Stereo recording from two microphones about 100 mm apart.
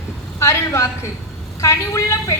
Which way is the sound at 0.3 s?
30° left (ahead or behind).